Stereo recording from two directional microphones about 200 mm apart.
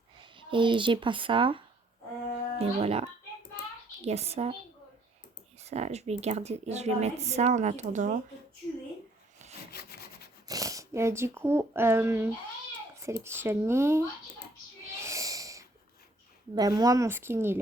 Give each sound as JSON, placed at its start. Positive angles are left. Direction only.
{"t": 0.2, "sound": "a woman's voice", "side_deg": -25}
{"t": 5.6, "sound": "a woman's voice", "side_deg": -35}
{"t": 9.7, "sound": "wood", "side_deg": 50}
{"t": 10.5, "sound": "speech", "side_deg": -15}
{"t": 15.0, "sound": "snort", "side_deg": -15}
{"t": 16.6, "sound": "speech", "side_deg": -20}